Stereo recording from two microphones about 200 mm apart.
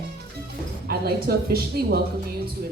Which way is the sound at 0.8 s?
50° right (ahead or behind).